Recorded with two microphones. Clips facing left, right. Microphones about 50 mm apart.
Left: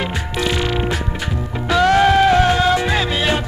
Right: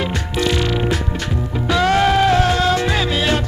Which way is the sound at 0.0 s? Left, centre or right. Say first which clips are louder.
Right 1 dB; centre.